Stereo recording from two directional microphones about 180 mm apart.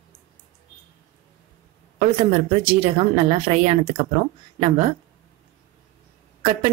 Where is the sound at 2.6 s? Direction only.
30° right (ahead or behind).